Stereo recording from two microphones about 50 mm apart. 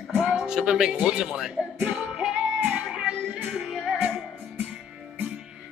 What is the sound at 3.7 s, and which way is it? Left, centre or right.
Music, centre.